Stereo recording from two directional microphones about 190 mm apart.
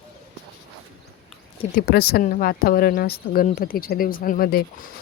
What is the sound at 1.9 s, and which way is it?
Speech, 55° left (ahead or behind).